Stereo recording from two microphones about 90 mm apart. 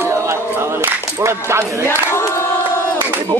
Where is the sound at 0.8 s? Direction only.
30° right (ahead or behind).